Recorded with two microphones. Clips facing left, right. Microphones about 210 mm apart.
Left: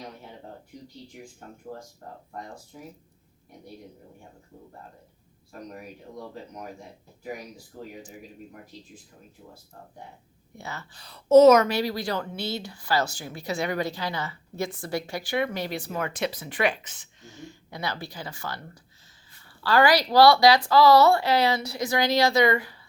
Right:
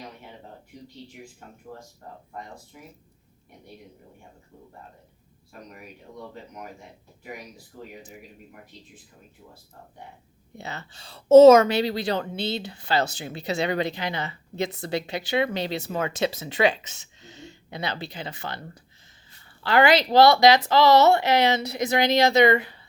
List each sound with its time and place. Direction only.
10.6 s a woman's voice: 20° right (ahead or behind)